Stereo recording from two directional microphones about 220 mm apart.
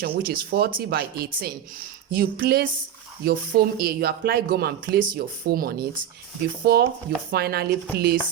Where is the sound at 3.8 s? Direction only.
45° right (ahead or behind).